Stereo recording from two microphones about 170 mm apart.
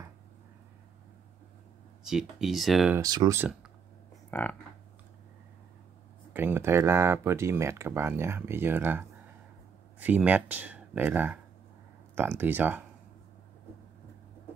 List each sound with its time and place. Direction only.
2.0 s speech: centre (ahead or behind)
3.0 s speech: 20° right (ahead or behind)
4.3 s a sound: 10° left (ahead or behind)
6.3 s speech: 10° right (ahead or behind)